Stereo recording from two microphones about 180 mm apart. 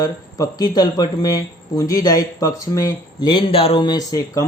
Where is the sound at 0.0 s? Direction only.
20° left (ahead or behind).